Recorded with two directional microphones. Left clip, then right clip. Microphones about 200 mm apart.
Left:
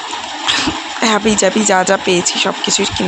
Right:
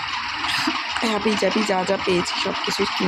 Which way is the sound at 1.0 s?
25° left (ahead or behind).